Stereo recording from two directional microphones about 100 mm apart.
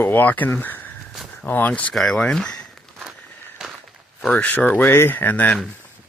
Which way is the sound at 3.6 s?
5° right (ahead or behind).